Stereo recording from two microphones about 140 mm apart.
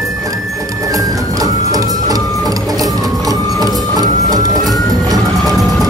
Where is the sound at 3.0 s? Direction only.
25° right (ahead or behind).